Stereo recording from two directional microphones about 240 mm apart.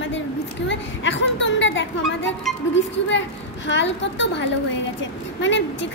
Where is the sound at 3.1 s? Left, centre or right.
Left.